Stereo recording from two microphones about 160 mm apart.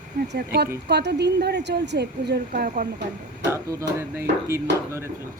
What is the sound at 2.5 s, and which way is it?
Speech, 70° right (ahead or behind).